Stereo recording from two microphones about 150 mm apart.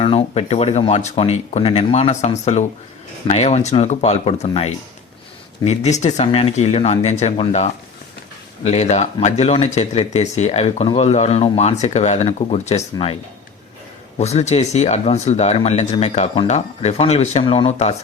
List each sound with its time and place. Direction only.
0.0 s speech: 40° left (ahead or behind)
14.2 s speech: 45° left (ahead or behind)